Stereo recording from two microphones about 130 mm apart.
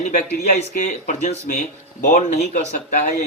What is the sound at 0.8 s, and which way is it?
Speech, 65° left (ahead or behind).